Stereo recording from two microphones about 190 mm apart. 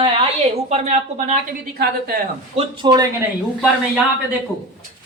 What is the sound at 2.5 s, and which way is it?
Speech, 20° right (ahead or behind).